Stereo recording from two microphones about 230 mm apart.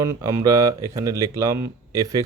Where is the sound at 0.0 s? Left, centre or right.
Centre.